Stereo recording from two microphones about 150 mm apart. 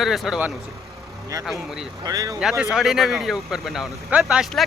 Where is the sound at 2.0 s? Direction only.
25° right (ahead or behind).